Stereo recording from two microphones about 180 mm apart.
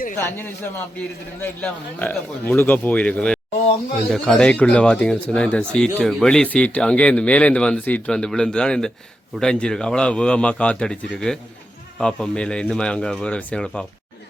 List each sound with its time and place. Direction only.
0.2 s a man's voice: 10° left (ahead or behind)